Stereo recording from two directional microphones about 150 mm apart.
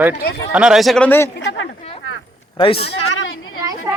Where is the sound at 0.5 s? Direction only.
5° right (ahead or behind); by 1.3 s 10° left (ahead or behind).